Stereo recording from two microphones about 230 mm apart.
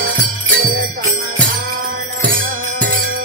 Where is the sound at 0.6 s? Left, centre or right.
Right.